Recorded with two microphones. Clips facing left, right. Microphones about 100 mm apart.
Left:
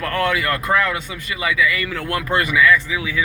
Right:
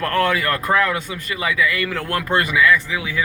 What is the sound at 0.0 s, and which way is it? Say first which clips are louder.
Speech: right 1 dB; 40° right (ahead or behind).